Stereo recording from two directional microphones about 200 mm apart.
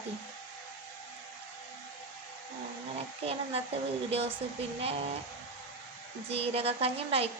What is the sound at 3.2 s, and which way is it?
Speech, 30° right (ahead or behind).